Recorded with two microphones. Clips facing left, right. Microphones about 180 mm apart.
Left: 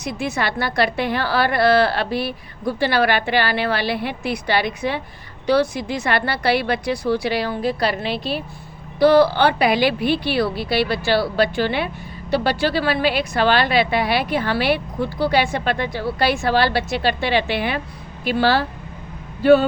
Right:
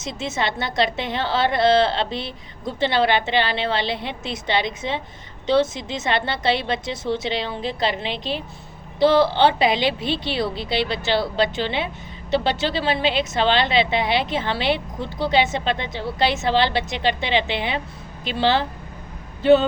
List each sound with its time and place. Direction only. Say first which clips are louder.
0.2 s a woman's voice: left 1 dB; 20° right (ahead or behind)